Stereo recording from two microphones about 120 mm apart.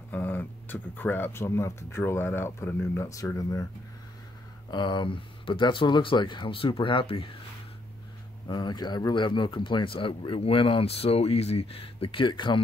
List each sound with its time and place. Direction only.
0.1 s speech: 15° left (ahead or behind)
4.6 s speech: 40° left (ahead or behind)
8.5 s speech: 35° left (ahead or behind)